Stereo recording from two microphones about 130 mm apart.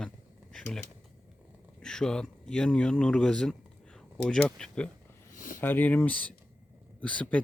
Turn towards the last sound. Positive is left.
turn(degrees=10)  # may be behind; listen again after turning